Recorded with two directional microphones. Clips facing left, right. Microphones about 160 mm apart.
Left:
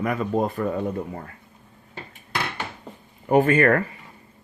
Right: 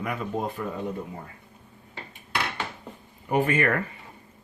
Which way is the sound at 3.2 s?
45° left (ahead or behind).